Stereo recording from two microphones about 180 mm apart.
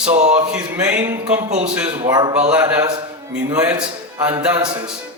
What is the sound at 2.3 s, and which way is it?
Speech, 5° right (ahead or behind).